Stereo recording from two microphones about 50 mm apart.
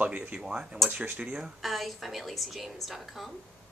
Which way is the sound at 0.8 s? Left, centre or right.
Right.